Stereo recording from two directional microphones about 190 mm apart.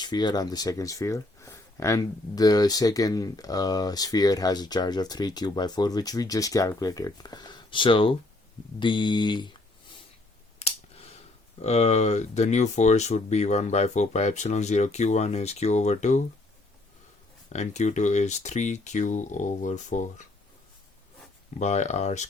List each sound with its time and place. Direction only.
0.0 s speech: 20° left (ahead or behind)
10.6 s a sound: 30° left (ahead or behind)
11.6 s speech: 35° left (ahead or behind)
17.5 s speech: 35° left (ahead or behind)
21.6 s speech: 35° left (ahead or behind)